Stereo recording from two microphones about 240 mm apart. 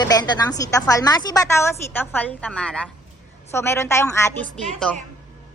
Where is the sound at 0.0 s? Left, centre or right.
Centre.